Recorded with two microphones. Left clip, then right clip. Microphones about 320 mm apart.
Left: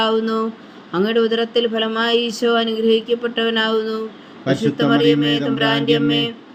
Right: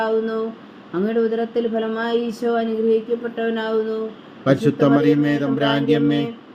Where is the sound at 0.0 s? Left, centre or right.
Left.